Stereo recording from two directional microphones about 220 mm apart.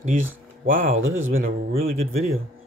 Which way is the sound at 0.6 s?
40° right (ahead or behind).